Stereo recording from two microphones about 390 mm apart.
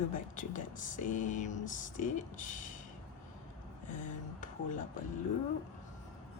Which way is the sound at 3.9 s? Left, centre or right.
Centre.